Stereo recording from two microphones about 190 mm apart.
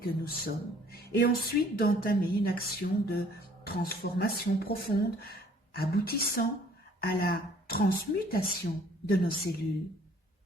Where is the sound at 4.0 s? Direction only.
55° left (ahead or behind).